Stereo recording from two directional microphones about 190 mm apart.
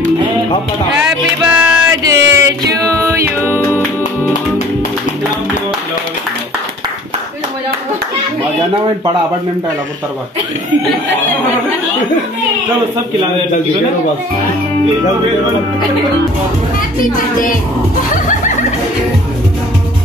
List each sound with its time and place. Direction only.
1.4 s music: 5° right (ahead or behind)
2.0 s music: 15° right (ahead or behind)